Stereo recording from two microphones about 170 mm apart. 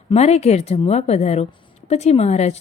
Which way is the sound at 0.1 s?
40° left (ahead or behind).